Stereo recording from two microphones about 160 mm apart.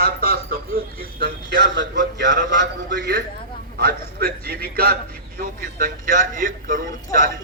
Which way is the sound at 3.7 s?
75° right (ahead or behind).